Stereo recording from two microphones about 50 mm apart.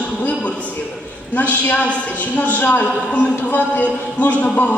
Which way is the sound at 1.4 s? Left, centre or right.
Left.